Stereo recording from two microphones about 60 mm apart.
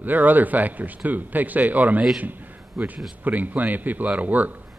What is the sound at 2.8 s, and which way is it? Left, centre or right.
Speech, centre.